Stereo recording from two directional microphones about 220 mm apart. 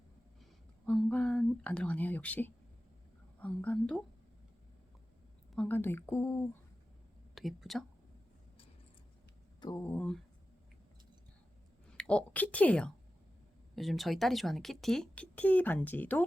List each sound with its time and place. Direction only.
0.9 s speech: 5° left (ahead or behind)
5.5 s speech: 10° left (ahead or behind)
7.3 s speech: centre (ahead or behind)
9.6 s speech: 15° left (ahead or behind)
11.9 s a woman's voice: 5° left (ahead or behind)